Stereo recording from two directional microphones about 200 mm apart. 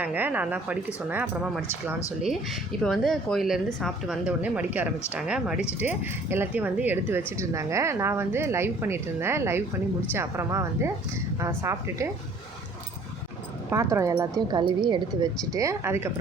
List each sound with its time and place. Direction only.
0.0 s speech: 10° right (ahead or behind)
2.8 s a woman's voice: centre (ahead or behind); by 12.1 s 15° right (ahead or behind)
13.7 s a woman's voice: 15° right (ahead or behind)